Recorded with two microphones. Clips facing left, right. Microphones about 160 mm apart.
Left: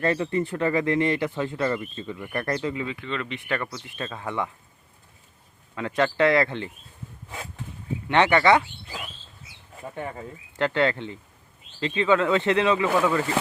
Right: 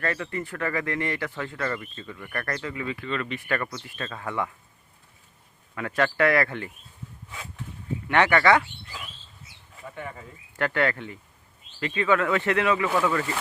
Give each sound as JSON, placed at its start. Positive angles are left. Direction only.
{"t": 0.0, "sound": "speech", "side_deg": 25}
{"t": 5.7, "sound": "speech", "side_deg": 20}
{"t": 8.0, "sound": "speech", "side_deg": 20}
{"t": 9.8, "sound": "speech", "side_deg": 30}